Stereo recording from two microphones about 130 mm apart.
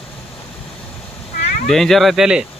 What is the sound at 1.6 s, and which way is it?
Speech, 5° left (ahead or behind).